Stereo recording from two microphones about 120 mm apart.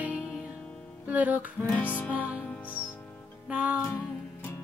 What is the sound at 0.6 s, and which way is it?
Music, 10° left (ahead or behind).